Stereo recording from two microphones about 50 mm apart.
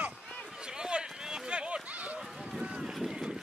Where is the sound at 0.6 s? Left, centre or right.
Centre.